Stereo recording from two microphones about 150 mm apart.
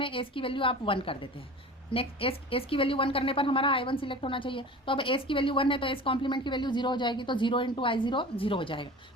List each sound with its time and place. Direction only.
0.0 s a woman's voice: 35° left (ahead or behind)